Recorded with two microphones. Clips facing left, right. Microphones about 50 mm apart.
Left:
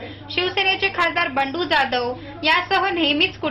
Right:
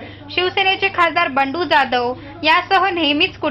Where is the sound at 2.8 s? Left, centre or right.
Right.